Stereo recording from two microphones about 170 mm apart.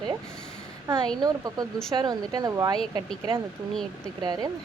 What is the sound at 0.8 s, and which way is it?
Speech, 25° right (ahead or behind).